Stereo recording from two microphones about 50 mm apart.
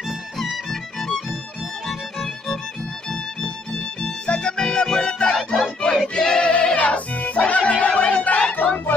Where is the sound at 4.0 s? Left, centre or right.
Centre.